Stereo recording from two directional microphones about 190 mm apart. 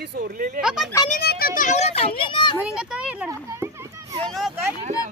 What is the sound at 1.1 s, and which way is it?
Children playing, 50° left (ahead or behind).